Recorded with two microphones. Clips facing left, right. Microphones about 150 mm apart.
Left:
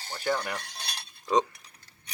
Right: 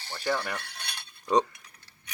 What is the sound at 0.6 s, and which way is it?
Cutlery, 35° left (ahead or behind).